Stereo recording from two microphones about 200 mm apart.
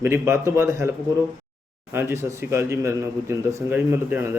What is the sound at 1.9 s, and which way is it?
Speech, 10° right (ahead or behind).